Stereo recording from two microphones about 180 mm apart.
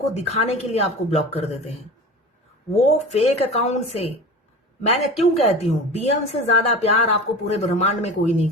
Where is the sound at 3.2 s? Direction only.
35° left (ahead or behind).